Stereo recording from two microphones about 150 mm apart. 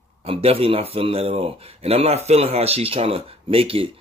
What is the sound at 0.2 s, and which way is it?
Speech, 40° right (ahead or behind).